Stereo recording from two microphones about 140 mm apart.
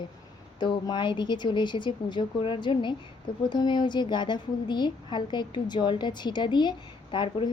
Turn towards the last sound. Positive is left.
turn(degrees=35)  # may be behind; listen again after turning